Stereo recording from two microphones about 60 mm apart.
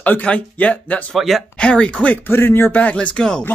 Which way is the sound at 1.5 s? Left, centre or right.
Centre.